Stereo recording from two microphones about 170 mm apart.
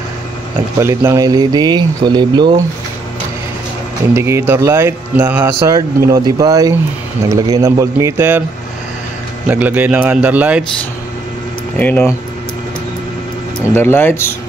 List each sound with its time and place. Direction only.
0.7 s speech: 15° right (ahead or behind)
4.1 s speech: 15° right (ahead or behind)
9.5 s speech: 10° right (ahead or behind)
11.8 s speech: 10° left (ahead or behind)
13.7 s speech: 15° left (ahead or behind)